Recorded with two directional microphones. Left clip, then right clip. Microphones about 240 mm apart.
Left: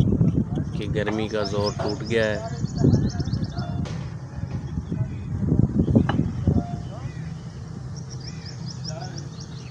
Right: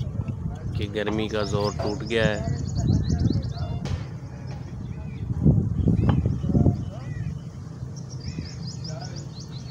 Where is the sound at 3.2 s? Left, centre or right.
Right.